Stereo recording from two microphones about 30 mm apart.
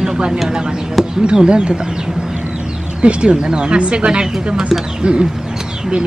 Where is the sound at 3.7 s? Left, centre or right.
Right.